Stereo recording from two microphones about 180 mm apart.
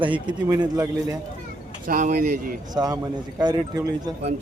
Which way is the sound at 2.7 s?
20° right (ahead or behind).